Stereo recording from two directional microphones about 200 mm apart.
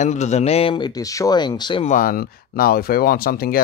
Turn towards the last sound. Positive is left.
turn(degrees=50)  # may be behind; listen again after turning